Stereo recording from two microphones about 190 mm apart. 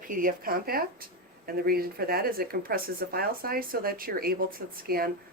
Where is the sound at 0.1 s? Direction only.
45° right (ahead or behind).